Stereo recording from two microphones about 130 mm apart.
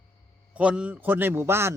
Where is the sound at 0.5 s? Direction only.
10° right (ahead or behind).